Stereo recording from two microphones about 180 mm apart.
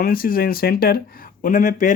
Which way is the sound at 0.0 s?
55° left (ahead or behind).